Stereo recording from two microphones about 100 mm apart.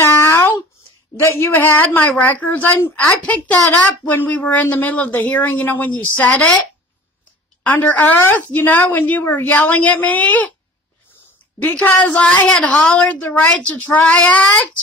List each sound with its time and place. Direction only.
0.0 s a sound: 25° left (ahead or behind)
1.2 s a woman's voice: 25° left (ahead or behind)
7.6 s a woman's voice: 15° left (ahead or behind)
11.6 s a woman's voice: 15° left (ahead or behind)